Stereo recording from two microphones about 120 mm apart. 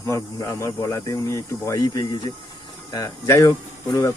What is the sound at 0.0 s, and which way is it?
Speech, 25° left (ahead or behind).